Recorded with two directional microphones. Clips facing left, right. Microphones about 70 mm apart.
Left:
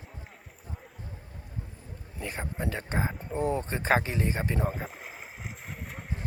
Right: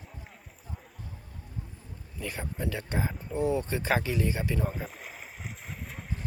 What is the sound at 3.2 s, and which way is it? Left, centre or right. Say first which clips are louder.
Speech: right 3 dB; left.